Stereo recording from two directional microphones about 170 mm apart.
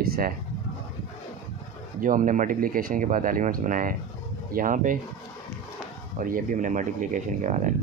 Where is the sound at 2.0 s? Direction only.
50° right (ahead or behind).